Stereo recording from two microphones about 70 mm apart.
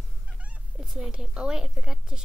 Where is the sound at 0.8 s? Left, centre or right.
Centre.